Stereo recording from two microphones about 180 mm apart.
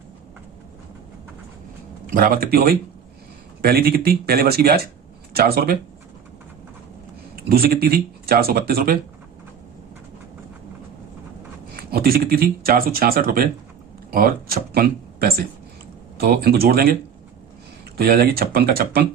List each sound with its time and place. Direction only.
2.0 s speech: 55° right (ahead or behind)
7.3 s speech: 55° right (ahead or behind)
11.8 s speech: 60° right (ahead or behind)